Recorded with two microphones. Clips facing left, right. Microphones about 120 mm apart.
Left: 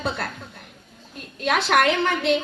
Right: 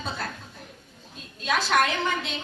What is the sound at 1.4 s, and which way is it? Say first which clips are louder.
Speech: left 4 dB; 65° left (ahead or behind).